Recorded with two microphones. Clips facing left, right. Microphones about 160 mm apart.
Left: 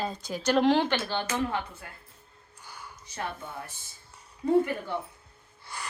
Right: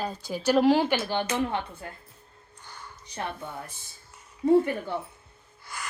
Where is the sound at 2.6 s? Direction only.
10° left (ahead or behind).